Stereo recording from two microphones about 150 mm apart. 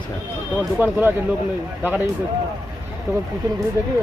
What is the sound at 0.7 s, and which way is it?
Speech, 10° right (ahead or behind).